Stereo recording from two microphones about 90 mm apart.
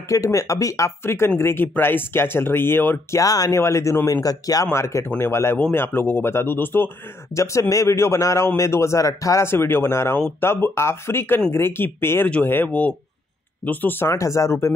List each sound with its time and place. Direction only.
0.1 s speech: 35° left (ahead or behind)
3.2 s speech: 40° left (ahead or behind)
4.7 s speech: 30° left (ahead or behind)
7.3 s speech: 35° left (ahead or behind)
14.1 s speech: 35° left (ahead or behind)